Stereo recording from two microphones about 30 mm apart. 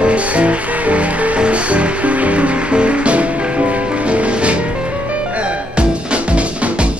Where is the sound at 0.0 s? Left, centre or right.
Right.